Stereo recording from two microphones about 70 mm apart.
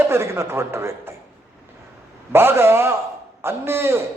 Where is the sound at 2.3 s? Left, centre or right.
Right.